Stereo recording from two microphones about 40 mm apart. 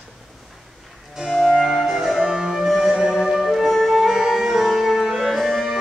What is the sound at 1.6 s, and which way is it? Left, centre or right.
Music, centre.